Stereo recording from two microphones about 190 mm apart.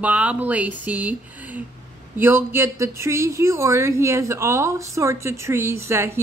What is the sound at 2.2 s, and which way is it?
Speech, 10° right (ahead or behind).